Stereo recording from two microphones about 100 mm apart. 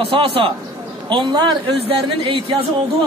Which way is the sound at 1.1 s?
50° right (ahead or behind).